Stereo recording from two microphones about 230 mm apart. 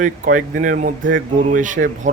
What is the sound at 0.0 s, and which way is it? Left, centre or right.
Speech, right.